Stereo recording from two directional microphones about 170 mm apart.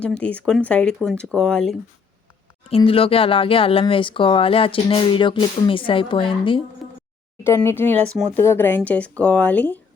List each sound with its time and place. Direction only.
0.0 s speech: 10° left (ahead or behind)
2.6 s speech: 35° left (ahead or behind)
6.8 s a sound: centre (ahead or behind)
7.4 s speech: 15° left (ahead or behind)